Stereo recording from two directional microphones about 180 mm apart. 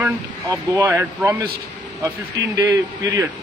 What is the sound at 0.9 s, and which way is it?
Speech, 10° right (ahead or behind).